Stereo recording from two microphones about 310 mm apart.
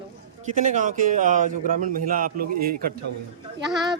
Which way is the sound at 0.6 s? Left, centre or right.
Right.